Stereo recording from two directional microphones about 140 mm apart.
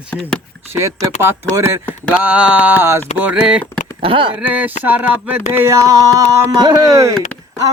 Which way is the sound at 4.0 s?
40° right (ahead or behind).